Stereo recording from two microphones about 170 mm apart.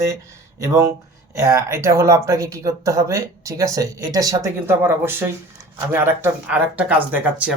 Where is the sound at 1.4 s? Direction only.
15° right (ahead or behind).